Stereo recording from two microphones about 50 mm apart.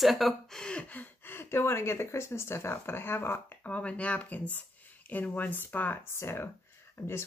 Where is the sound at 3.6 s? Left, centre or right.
Left.